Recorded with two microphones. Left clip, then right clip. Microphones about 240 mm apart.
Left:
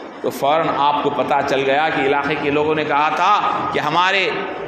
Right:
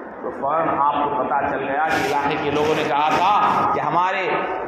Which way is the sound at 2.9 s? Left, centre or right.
Left.